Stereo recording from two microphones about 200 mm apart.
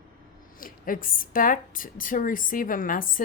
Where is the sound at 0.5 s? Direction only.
45° left (ahead or behind).